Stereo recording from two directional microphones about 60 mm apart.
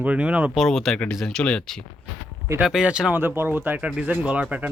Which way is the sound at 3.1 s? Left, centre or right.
Right.